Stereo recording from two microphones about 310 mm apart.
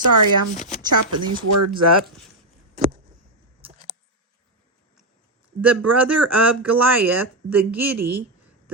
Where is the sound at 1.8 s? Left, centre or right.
Right.